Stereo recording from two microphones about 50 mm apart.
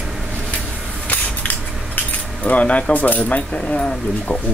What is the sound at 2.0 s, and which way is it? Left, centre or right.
Speech, left.